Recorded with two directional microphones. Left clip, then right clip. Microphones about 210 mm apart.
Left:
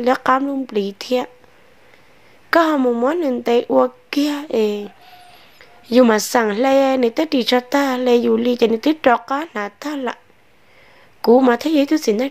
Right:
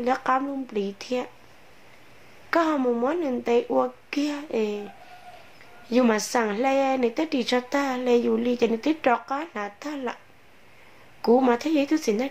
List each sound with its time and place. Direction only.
0.0 s speech: 40° left (ahead or behind)
2.5 s speech: 40° left (ahead or behind)
5.9 s speech: 40° left (ahead or behind)
11.1 s speech: 35° left (ahead or behind)